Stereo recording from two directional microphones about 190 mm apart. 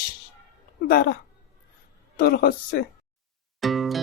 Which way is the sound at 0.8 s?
50° left (ahead or behind).